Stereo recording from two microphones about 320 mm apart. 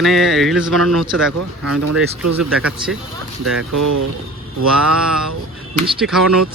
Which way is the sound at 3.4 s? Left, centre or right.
Right.